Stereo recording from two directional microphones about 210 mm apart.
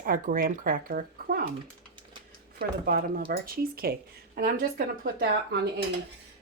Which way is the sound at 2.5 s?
45° right (ahead or behind).